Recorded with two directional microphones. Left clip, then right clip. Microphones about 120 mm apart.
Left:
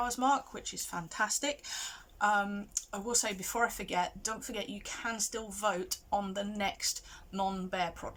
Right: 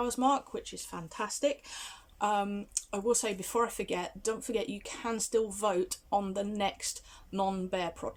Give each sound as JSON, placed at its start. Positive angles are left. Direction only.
{"t": 0.0, "sound": "speech", "side_deg": -25}